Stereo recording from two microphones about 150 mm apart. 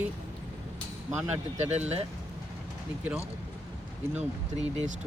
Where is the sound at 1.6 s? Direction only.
45° right (ahead or behind).